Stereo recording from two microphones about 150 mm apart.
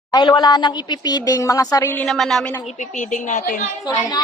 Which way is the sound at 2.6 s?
55° left (ahead or behind).